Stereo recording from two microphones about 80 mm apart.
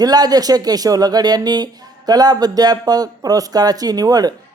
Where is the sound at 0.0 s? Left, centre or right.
Right.